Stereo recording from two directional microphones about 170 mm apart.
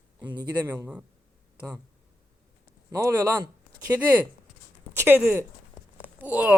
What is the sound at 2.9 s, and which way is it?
Speech, 15° right (ahead or behind).